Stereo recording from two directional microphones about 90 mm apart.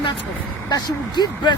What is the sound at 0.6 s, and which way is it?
Speech, 50° left (ahead or behind).